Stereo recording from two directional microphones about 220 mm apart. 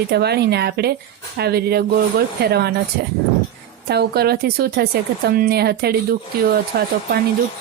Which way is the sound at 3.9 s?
45° right (ahead or behind).